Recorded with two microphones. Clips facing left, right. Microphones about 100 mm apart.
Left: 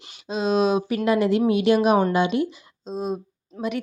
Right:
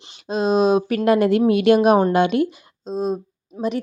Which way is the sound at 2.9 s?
40° right (ahead or behind).